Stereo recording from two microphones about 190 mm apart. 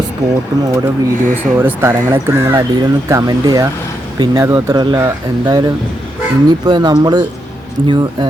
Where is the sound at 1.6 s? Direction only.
10° right (ahead or behind).